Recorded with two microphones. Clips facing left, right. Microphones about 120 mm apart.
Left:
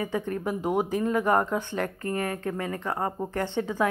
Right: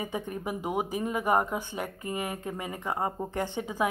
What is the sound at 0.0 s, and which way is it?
Speech, 15° right (ahead or behind).